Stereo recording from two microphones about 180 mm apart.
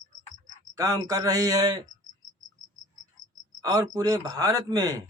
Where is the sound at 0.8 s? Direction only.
20° right (ahead or behind).